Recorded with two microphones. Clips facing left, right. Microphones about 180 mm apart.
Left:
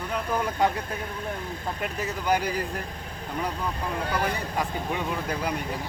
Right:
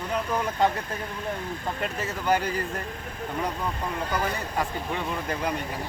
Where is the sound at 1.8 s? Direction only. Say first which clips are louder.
Even; 15° left (ahead or behind).